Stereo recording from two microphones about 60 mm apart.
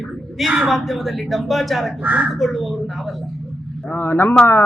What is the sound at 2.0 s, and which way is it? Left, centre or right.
Speech, right.